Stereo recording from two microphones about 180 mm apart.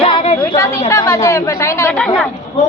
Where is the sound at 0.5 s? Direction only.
15° left (ahead or behind).